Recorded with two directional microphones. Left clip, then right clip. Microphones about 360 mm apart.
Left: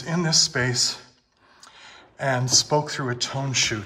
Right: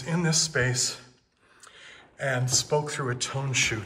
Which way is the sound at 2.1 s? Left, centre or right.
Centre.